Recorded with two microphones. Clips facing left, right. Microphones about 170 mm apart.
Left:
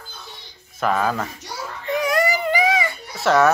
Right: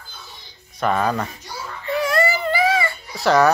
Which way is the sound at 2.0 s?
15° left (ahead or behind).